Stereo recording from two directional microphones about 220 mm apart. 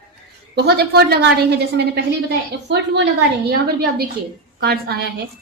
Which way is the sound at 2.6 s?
50° right (ahead or behind).